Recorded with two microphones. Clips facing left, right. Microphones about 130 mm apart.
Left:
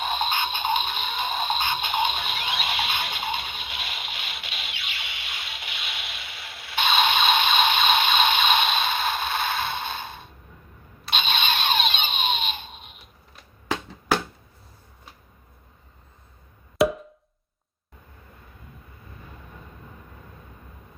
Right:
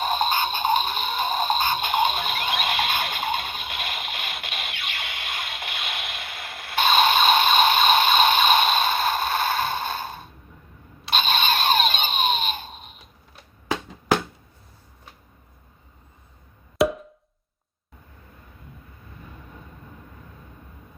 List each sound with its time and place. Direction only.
0.0 s music: 40° right (ahead or behind)
11.1 s a sound: 40° right (ahead or behind)
16.7 s wood block: centre (ahead or behind)